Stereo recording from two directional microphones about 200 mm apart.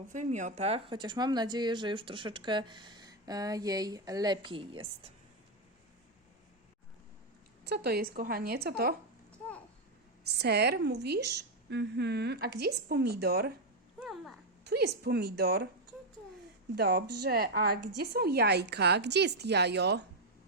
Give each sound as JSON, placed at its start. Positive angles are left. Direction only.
{"t": 0.1, "sound": "speech", "side_deg": -40}
{"t": 7.6, "sound": "speech", "side_deg": -55}
{"t": 10.2, "sound": "a woman's voice", "side_deg": -55}
{"t": 14.0, "sound": "a sound", "side_deg": 0}
{"t": 14.6, "sound": "speech", "side_deg": -55}
{"t": 16.7, "sound": "a woman's voice", "side_deg": -55}